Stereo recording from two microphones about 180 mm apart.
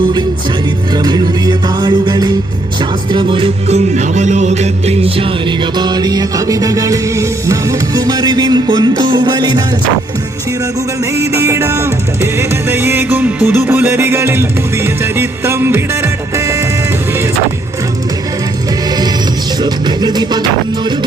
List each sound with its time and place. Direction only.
0.9 s music: 20° right (ahead or behind)
11.3 s music: 15° right (ahead or behind)
19.6 s music: 25° right (ahead or behind)